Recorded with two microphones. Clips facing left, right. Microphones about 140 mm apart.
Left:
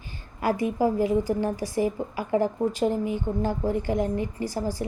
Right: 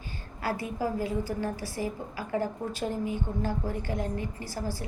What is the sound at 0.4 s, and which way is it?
A woman's voice, 15° left (ahead or behind).